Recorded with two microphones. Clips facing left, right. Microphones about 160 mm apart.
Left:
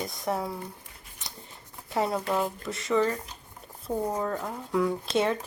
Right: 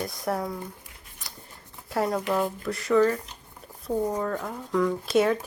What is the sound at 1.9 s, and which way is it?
Speech, 5° left (ahead or behind).